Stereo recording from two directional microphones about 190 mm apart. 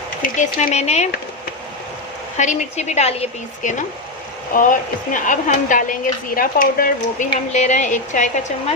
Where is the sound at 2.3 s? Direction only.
40° left (ahead or behind).